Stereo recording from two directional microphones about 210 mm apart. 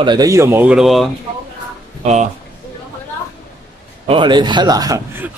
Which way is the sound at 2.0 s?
35° right (ahead or behind).